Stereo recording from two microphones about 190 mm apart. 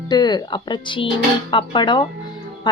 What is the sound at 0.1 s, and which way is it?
Speech, 20° left (ahead or behind).